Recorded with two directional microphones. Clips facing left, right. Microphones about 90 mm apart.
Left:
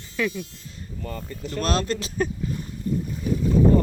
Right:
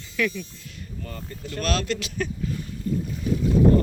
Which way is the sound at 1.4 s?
30° left (ahead or behind).